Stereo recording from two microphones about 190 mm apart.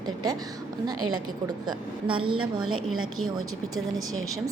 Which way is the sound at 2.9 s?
90° right.